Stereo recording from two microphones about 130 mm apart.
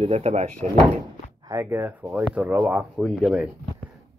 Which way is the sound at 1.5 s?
20° right (ahead or behind).